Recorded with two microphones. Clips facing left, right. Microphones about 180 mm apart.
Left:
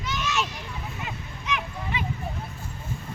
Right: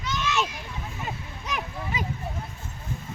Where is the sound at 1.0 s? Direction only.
40° right (ahead or behind).